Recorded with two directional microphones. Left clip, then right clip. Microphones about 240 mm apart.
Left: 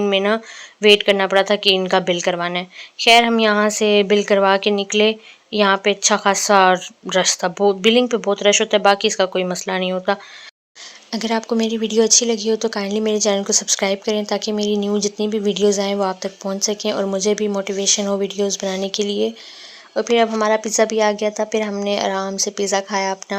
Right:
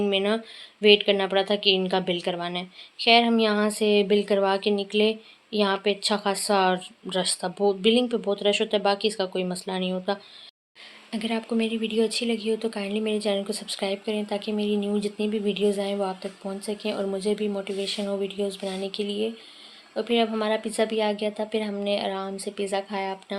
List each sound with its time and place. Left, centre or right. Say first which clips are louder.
0.0 s a woman's voice: left 7 dB; centre